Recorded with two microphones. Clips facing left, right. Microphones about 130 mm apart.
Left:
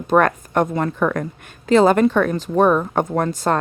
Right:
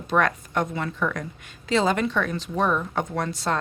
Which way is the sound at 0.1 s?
50° left (ahead or behind).